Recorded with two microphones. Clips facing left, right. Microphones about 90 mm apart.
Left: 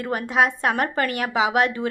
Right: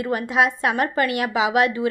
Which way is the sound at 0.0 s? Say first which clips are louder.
Right 1 dB; 45° left (ahead or behind).